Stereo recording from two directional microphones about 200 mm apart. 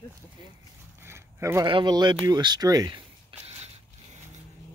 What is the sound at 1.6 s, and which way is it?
Speech, 25° right (ahead or behind).